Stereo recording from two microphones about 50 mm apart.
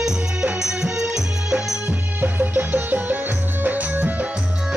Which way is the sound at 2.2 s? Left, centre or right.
Right.